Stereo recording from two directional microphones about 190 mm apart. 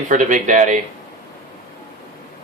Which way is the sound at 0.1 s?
45° right (ahead or behind).